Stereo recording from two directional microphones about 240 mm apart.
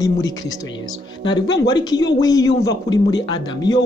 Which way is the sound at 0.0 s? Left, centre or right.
Centre.